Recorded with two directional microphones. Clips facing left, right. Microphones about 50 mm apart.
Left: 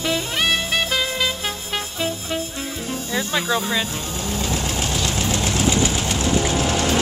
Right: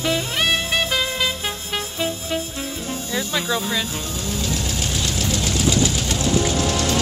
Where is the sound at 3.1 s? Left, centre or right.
Centre.